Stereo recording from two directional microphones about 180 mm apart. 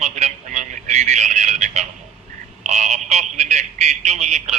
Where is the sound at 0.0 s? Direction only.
40° right (ahead or behind).